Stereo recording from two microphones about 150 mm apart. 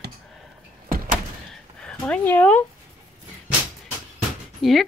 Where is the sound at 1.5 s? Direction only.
5° left (ahead or behind).